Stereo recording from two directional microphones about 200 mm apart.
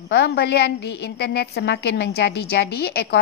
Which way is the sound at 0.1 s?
55° left (ahead or behind).